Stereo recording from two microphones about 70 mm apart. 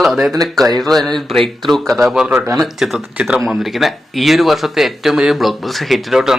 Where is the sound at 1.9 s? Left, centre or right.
Centre.